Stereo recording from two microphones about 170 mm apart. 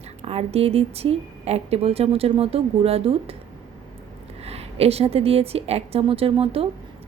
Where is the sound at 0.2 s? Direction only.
35° right (ahead or behind).